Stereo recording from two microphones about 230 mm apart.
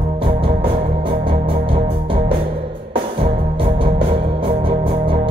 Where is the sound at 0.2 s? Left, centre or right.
Right.